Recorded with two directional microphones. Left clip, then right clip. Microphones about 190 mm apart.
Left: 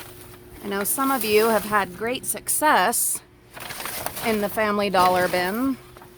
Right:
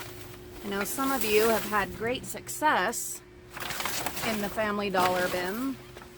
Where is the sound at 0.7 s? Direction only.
55° left (ahead or behind).